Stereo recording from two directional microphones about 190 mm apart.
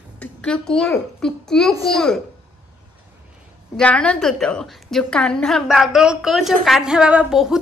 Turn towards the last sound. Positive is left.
turn(degrees=0)  # may be behind; listen again after turning